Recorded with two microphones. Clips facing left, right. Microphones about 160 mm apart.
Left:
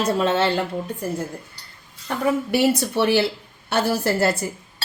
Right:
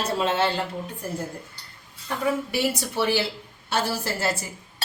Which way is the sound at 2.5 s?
60° left (ahead or behind).